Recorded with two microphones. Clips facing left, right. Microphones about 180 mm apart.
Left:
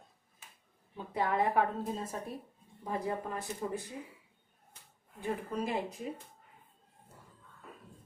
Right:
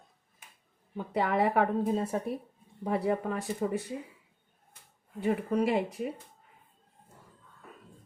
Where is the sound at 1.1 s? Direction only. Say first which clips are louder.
Right 3 dB; 75° right (ahead or behind).